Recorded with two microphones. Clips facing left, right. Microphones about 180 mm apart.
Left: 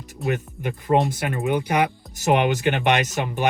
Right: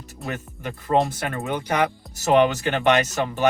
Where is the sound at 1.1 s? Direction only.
15° left (ahead or behind).